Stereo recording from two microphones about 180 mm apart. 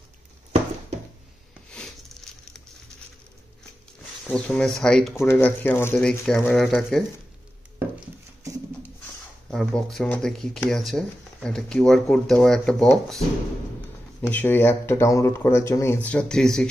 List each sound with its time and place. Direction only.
4.3 s speech: 5° left (ahead or behind)
9.5 s speech: 5° left (ahead or behind)
14.2 s speech: 10° left (ahead or behind)